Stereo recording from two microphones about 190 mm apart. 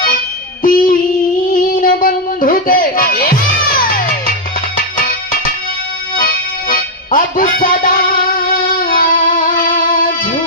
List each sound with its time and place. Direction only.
0.6 s music: 45° left (ahead or behind)
6.1 s music: 50° left (ahead or behind)